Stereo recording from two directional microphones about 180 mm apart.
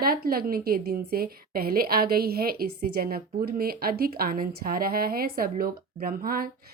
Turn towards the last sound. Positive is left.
turn(degrees=-55)  # may be behind; listen again after turning